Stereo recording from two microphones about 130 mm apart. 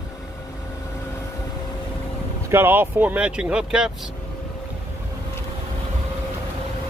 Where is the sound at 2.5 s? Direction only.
15° right (ahead or behind).